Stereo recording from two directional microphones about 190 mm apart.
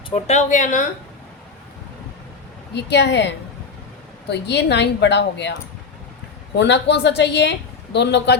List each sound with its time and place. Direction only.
0.1 s speech: 35° left (ahead or behind)
2.7 s a woman's voice: 65° left (ahead or behind)
6.6 s a woman's voice: 65° left (ahead or behind)